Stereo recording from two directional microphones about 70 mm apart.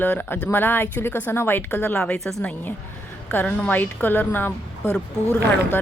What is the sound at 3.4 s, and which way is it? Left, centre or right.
Speech, left.